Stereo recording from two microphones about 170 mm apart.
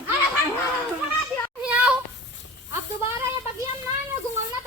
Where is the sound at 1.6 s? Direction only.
5° right (ahead or behind).